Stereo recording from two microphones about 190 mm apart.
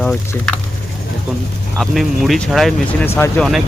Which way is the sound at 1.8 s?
Centre (ahead or behind).